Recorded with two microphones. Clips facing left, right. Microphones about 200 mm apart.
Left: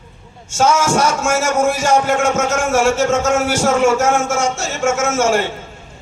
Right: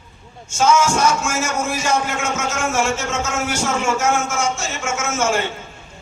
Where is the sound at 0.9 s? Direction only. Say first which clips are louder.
Left 3 dB; 45° left (ahead or behind).